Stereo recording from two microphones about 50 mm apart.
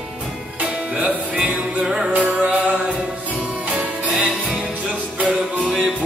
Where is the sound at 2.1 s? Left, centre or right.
Right.